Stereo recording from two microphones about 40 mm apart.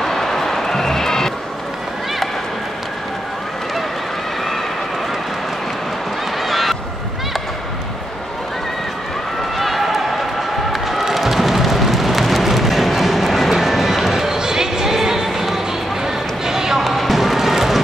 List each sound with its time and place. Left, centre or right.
0.0 s music: centre
6.4 s a sound: centre
9.6 s a sound: centre
10.7 s music: centre
16.4 s basketball bounce: centre
16.8 s basketball bounce: centre